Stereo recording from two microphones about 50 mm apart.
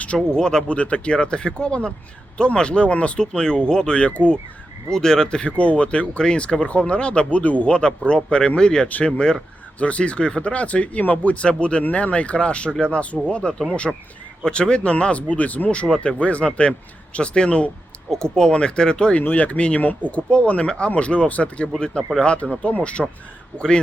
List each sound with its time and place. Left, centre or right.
0.3 s speech: centre
0.8 s speech: left
13.5 s speech: centre
19.3 s speech: left